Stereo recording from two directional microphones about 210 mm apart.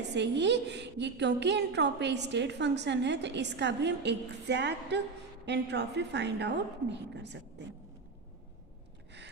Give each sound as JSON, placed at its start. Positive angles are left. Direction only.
{"t": 0.1, "sound": "a woman's voice", "side_deg": -55}